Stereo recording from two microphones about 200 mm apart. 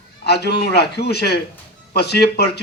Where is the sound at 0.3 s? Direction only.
55° left (ahead or behind).